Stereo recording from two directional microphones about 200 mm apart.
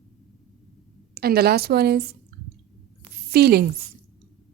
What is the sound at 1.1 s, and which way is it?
Speech, 50° right (ahead or behind).